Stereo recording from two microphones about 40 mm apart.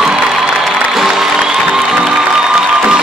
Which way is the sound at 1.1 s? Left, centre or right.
Centre.